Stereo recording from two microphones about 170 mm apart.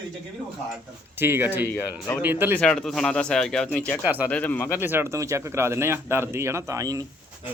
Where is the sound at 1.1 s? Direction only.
15° right (ahead or behind).